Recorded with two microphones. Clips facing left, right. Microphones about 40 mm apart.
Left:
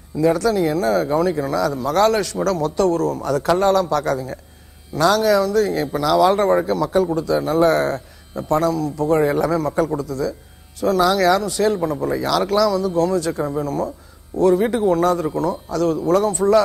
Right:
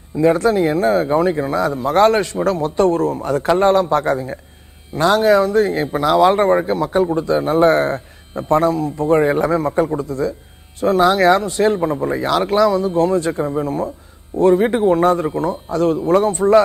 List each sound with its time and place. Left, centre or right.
0.1 s a man's voice: right